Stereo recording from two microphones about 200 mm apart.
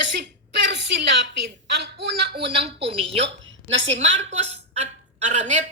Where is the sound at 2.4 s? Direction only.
25° right (ahead or behind).